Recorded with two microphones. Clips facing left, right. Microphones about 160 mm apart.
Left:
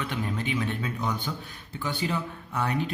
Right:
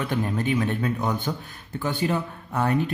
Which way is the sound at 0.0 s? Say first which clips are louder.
Right 5 dB; 45° right (ahead or behind).